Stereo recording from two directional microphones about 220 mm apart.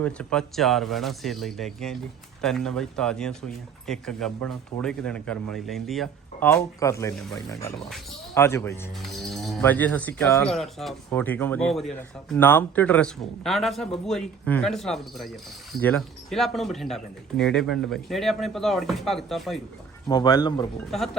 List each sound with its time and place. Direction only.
0.0 s speech: 5° left (ahead or behind)
9.0 s music: centre (ahead or behind)
9.6 s speech: 10° left (ahead or behind)
20.1 s speech: 15° left (ahead or behind)